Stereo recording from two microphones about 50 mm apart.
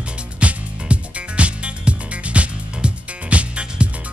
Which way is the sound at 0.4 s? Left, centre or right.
Right.